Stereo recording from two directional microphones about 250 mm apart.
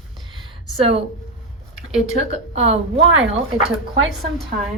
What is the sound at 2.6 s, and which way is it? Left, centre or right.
Speech, right.